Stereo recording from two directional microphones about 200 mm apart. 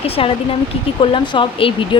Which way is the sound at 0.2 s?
30° left (ahead or behind).